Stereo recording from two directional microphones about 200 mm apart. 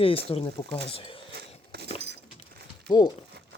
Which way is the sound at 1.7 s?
50° right (ahead or behind).